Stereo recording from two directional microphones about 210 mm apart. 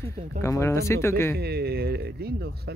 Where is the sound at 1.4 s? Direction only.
50° right (ahead or behind).